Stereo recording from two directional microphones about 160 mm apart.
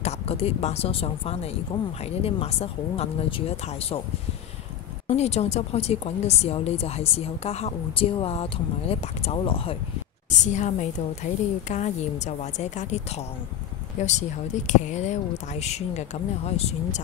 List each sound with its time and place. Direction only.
0.0 s a woman's voice: 40° left (ahead or behind)
5.0 s a woman's voice: 40° left (ahead or behind)
10.4 s speech: 50° left (ahead or behind)